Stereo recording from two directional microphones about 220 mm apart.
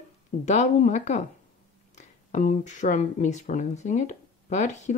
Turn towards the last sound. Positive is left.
turn(degrees=30)  # may be behind; listen again after turning